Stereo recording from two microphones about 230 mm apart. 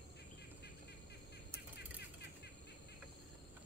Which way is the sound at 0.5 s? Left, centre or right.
Left.